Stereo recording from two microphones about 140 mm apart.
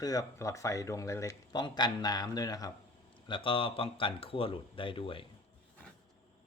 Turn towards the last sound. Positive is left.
turn(degrees=40)  # may be behind; listen again after turning